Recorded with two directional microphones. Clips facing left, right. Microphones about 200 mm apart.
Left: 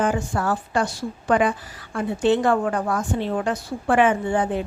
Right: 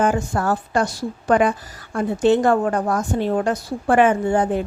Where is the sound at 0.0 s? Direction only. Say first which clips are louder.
Right 3 dB; 45° right (ahead or behind).